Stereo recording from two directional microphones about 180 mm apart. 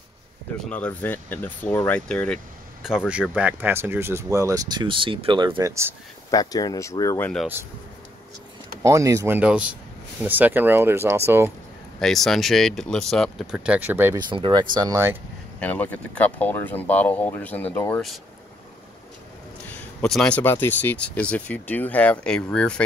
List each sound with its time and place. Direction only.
0.7 s speech: 10° left (ahead or behind); by 5.9 s 15° right (ahead or behind)
6.3 s speech: 20° left (ahead or behind)
8.8 s speech: 15° right (ahead or behind)
12.0 s speech: centre (ahead or behind)
14.1 s speech: 25° right (ahead or behind)
15.6 s speech: 10° left (ahead or behind)
19.7 s speech: 5° left (ahead or behind)